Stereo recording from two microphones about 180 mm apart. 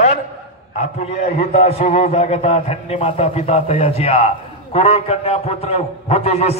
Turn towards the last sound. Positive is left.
turn(degrees=35)  # may be behind; listen again after turning